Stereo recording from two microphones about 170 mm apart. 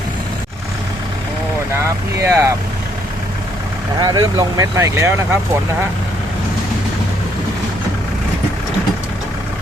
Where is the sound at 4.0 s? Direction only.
20° right (ahead or behind).